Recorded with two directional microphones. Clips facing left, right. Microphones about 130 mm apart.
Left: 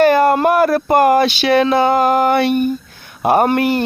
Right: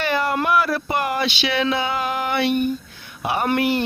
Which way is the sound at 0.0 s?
45° left (ahead or behind).